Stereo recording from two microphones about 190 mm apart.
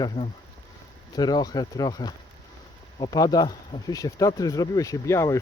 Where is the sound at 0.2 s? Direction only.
30° left (ahead or behind).